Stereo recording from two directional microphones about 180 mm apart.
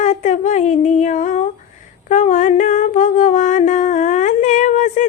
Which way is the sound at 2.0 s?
45° left (ahead or behind).